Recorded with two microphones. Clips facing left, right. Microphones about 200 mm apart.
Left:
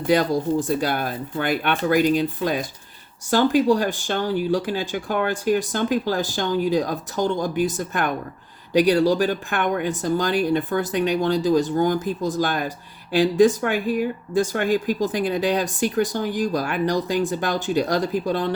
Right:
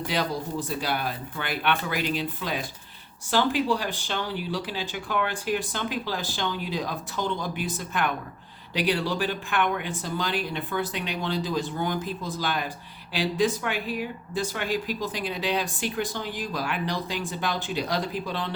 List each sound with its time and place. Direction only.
0.1 s speech: 45° left (ahead or behind)